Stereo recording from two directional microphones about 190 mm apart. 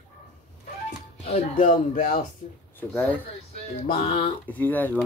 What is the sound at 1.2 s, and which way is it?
Speech, 45° left (ahead or behind).